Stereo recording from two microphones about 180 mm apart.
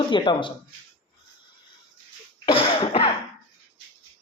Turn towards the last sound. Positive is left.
turn(degrees=30)  # may be behind; listen again after turning